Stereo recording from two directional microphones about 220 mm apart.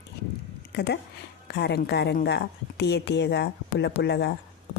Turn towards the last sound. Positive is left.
turn(degrees=50)  # may be behind; listen again after turning